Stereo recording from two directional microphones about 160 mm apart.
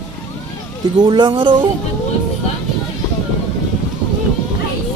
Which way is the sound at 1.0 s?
30° right (ahead or behind).